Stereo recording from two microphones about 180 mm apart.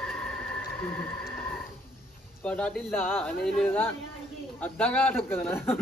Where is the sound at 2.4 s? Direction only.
5° left (ahead or behind).